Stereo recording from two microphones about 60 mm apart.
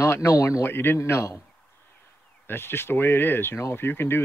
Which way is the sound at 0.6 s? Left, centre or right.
Left.